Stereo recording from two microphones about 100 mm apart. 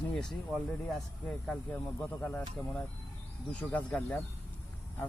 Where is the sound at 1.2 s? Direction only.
10° left (ahead or behind).